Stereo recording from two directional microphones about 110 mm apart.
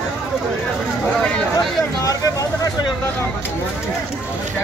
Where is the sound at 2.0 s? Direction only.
30° left (ahead or behind).